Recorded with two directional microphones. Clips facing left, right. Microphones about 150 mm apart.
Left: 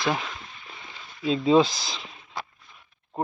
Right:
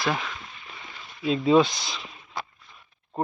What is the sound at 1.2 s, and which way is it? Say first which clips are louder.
Speech: even; 25° left (ahead or behind).